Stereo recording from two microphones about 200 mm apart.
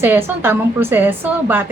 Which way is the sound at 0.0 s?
10° right (ahead or behind).